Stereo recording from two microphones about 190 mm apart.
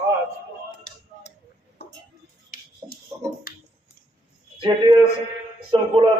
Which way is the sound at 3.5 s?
50° left (ahead or behind).